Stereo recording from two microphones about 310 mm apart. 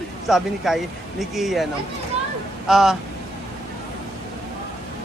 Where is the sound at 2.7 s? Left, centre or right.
Centre.